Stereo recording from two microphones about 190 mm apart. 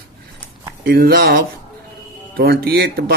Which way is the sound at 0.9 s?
50° right (ahead or behind).